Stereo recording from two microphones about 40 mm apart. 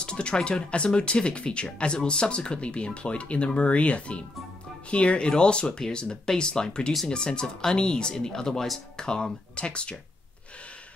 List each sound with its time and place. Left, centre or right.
0.0 s speech: left